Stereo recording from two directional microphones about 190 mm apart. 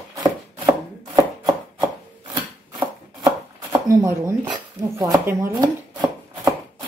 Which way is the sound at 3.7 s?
15° right (ahead or behind).